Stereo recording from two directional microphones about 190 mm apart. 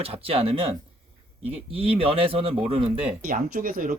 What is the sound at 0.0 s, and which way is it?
Speech, 30° right (ahead or behind).